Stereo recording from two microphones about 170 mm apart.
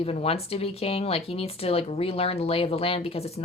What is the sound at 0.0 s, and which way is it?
Speech, 35° left (ahead or behind).